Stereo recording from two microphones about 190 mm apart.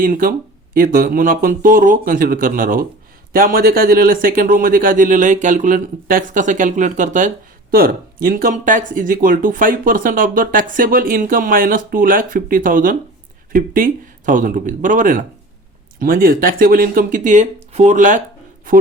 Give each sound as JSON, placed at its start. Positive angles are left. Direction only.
{"t": 0.0, "sound": "speech", "side_deg": -45}